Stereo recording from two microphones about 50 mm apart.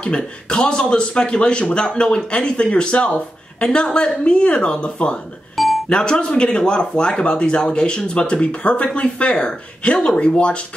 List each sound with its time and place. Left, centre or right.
0.0 s speech: centre